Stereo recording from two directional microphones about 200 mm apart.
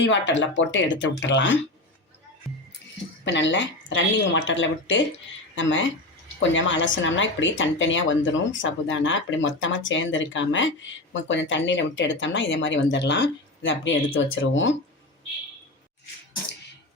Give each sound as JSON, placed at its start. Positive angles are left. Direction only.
{"t": 0.0, "sound": "speech", "side_deg": 65}
{"t": 3.2, "sound": "a woman's voice", "side_deg": 65}